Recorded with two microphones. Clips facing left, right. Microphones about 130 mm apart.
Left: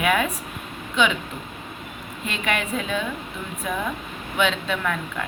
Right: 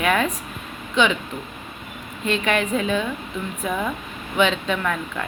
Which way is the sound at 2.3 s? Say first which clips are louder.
Right 5 dB; 5° left (ahead or behind).